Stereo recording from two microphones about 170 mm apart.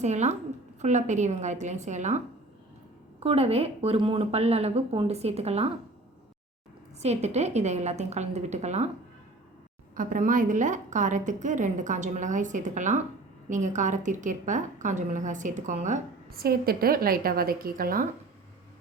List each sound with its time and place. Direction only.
0.0 s a woman's voice: 45° right (ahead or behind)
7.0 s a woman's voice: 40° right (ahead or behind)
9.9 s a woman's voice: 55° right (ahead or behind)